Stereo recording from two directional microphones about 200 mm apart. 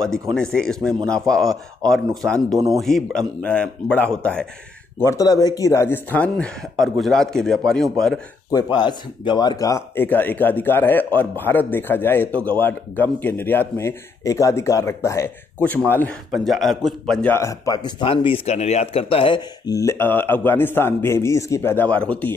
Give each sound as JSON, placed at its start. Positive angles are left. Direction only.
{"t": 0.3, "sound": "a man's voice", "side_deg": 5}
{"t": 1.8, "sound": "a man's voice", "side_deg": 5}
{"t": 5.0, "sound": "a man's voice", "side_deg": 15}
{"t": 8.5, "sound": "speech", "side_deg": 20}